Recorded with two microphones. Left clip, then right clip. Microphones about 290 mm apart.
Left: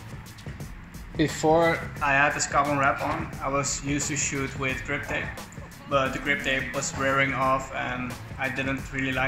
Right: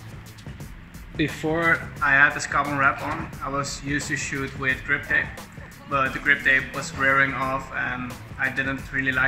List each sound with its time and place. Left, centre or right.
1.4 s speech: centre